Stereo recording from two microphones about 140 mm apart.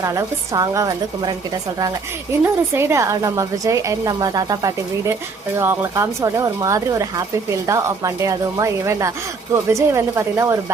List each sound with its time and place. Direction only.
0.0 s a woman's voice: 25° right (ahead or behind)
2.4 s a woman's voice: 20° right (ahead or behind)